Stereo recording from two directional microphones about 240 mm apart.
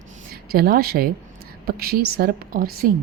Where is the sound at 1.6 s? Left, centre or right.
Right.